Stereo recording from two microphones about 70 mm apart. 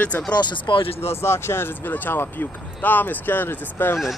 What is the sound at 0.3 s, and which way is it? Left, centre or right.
Speech, left.